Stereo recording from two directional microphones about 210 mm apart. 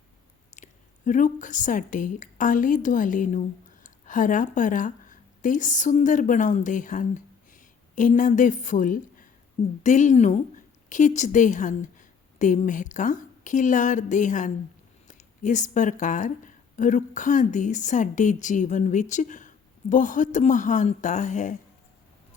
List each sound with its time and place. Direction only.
0.5 s a woman's voice: 35° left (ahead or behind)